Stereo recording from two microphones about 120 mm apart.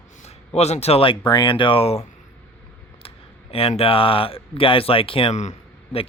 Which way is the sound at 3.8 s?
50° left (ahead or behind).